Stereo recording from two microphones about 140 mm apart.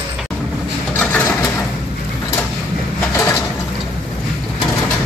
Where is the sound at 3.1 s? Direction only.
20° left (ahead or behind).